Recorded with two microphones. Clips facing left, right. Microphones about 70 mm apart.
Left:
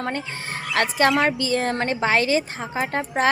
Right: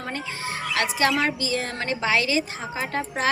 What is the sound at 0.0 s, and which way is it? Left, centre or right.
A woman's voice, left.